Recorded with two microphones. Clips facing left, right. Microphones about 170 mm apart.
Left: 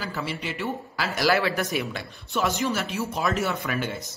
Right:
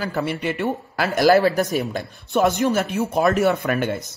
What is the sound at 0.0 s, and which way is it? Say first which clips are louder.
Speech: right 7 dB; 55° right (ahead or behind).